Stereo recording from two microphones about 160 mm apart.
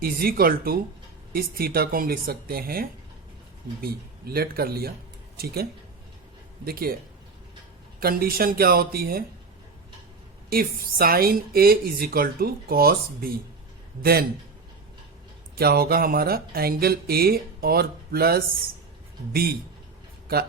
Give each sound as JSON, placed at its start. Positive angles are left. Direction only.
{"t": 0.0, "sound": "speech", "side_deg": -70}
{"t": 6.7, "sound": "speech", "side_deg": -70}
{"t": 7.9, "sound": "speech", "side_deg": -70}
{"t": 10.5, "sound": "speech", "side_deg": -70}
{"t": 15.5, "sound": "speech", "side_deg": -70}